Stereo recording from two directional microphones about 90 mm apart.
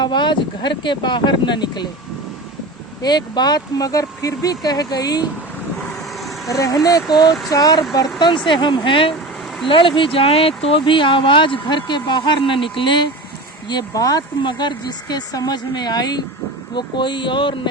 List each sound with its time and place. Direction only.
0.0 s speech: 55° left (ahead or behind)
3.0 s speech: 50° left (ahead or behind)
6.5 s speech: 40° left (ahead or behind); by 13.1 s 60° left (ahead or behind)
13.7 s speech: 45° left (ahead or behind)
14.4 s speech: 55° left (ahead or behind)
16.7 s speech: 60° left (ahead or behind)